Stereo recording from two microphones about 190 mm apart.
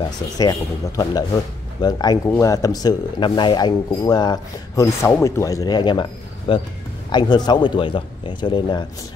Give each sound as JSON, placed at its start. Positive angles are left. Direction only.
{"t": 0.4, "sound": "speech", "side_deg": 20}